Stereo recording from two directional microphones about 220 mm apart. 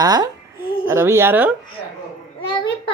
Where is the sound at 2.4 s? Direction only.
20° left (ahead or behind).